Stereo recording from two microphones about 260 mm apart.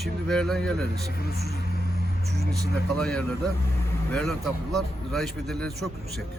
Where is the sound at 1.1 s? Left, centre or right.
Left.